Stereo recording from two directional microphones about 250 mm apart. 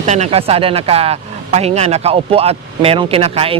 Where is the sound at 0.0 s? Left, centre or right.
Right.